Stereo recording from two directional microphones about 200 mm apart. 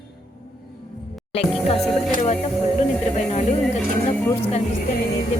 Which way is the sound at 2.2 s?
30° left (ahead or behind).